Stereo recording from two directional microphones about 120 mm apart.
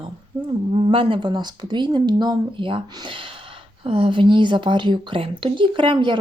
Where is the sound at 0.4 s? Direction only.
45° right (ahead or behind).